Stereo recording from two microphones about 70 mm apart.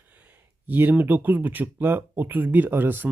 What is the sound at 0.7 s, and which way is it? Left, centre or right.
Speech, right.